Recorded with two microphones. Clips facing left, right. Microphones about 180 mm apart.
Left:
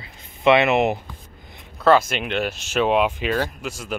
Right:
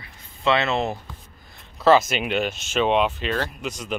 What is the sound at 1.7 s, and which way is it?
Speech, centre (ahead or behind).